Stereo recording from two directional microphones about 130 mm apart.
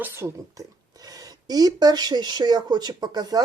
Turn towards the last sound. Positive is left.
turn(degrees=-30)  # may be behind; listen again after turning